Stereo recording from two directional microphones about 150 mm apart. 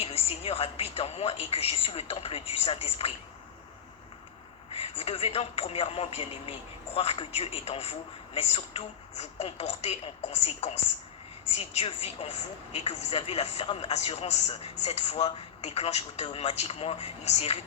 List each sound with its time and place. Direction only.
0.0 s speech: 40° left (ahead or behind)
4.7 s a woman's voice: 45° left (ahead or behind)